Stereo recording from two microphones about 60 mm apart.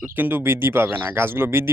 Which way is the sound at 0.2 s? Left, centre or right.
Right.